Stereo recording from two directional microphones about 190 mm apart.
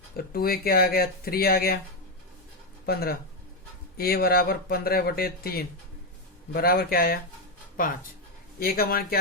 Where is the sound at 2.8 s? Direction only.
55° left (ahead or behind).